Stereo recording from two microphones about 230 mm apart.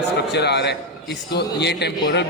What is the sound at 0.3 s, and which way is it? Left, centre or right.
A man's voice, left.